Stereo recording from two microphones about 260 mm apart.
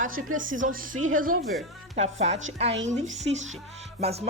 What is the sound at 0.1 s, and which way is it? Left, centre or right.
Speech, right.